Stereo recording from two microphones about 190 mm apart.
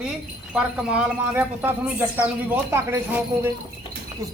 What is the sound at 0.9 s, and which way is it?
Speech, 5° right (ahead or behind).